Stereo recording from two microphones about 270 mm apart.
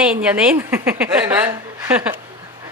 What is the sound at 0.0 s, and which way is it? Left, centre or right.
A woman's voice, centre.